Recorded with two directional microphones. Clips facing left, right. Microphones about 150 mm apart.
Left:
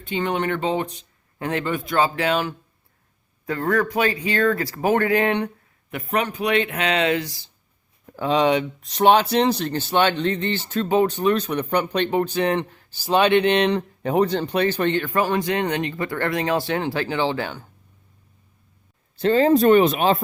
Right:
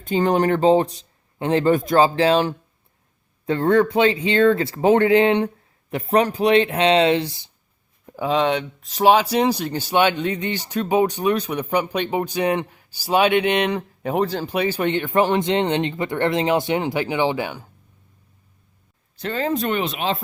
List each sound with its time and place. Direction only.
0.0 s speech: 40° right (ahead or behind)
1.6 s speech: 40° right (ahead or behind); by 7.5 s 25° right (ahead or behind)
8.0 s a sound: 15° right (ahead or behind)
8.3 s speech: centre (ahead or behind)
19.2 s speech: 35° left (ahead or behind)